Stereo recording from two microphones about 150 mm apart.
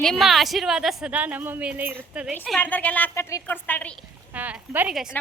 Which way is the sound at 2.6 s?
10° left (ahead or behind).